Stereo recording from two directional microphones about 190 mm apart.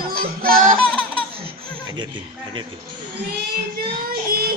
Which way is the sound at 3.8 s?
50° right (ahead or behind).